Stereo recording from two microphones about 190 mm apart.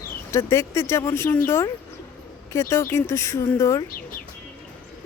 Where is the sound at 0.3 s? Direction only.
15° left (ahead or behind).